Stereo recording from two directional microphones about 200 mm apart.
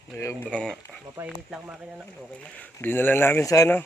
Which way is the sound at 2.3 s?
5° left (ahead or behind).